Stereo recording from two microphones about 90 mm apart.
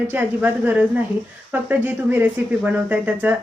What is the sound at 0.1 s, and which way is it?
Speech, 20° right (ahead or behind).